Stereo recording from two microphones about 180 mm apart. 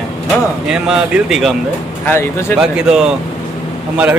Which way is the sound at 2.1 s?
15° left (ahead or behind).